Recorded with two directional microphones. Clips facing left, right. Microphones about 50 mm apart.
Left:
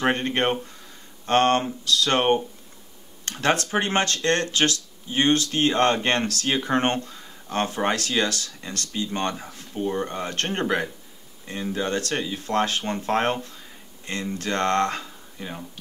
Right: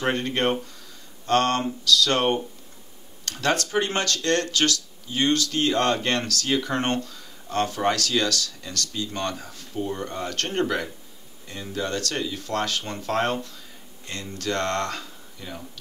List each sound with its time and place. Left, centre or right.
0.0 s speech: left